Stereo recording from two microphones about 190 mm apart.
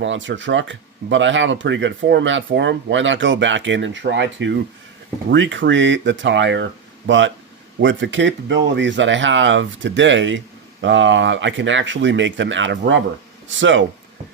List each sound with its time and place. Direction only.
0.0 s speech: 75° right (ahead or behind)
7.8 s speech: 75° right (ahead or behind)